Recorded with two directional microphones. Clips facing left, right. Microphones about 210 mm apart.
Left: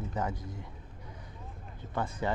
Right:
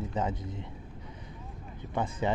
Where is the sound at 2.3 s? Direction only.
20° right (ahead or behind).